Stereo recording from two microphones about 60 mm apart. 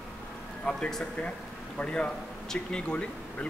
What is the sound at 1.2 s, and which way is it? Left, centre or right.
Speech, centre.